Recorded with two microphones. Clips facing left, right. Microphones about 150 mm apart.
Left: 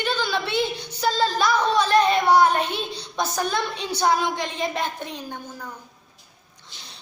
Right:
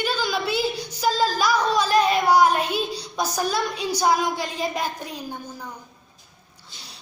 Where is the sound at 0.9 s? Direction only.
10° right (ahead or behind).